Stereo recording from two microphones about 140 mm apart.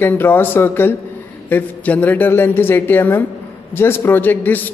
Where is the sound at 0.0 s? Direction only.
15° left (ahead or behind).